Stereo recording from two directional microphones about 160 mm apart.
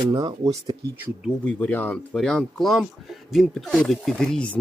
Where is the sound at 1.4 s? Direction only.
10° left (ahead or behind).